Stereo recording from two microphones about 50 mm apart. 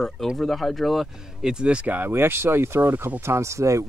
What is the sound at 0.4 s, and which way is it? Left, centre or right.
Speech, centre.